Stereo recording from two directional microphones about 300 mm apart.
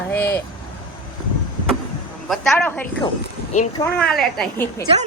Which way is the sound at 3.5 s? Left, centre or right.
Left.